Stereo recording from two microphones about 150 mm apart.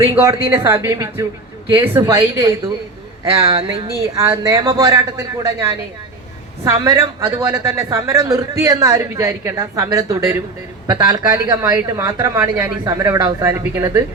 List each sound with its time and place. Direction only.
0.0 s a woman's voice: 20° right (ahead or behind)
3.3 s a sound: 40° right (ahead or behind)
4.0 s a woman's voice: 20° right (ahead or behind)
6.7 s a woman's voice: 20° right (ahead or behind)